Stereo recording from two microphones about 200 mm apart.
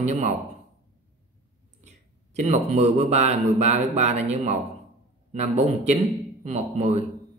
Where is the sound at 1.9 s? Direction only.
35° right (ahead or behind).